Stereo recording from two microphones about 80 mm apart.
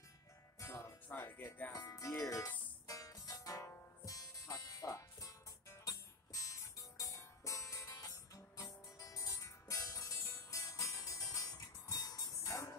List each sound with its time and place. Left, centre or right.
0.6 s music: left
1.0 s music: left
1.7 s music: left